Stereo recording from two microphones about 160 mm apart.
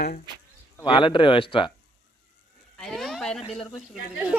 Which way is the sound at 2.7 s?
5° left (ahead or behind).